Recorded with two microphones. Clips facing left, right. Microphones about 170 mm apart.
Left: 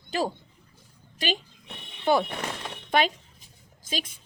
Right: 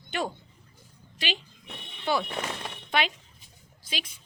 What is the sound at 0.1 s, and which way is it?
Speech, 35° left (ahead or behind).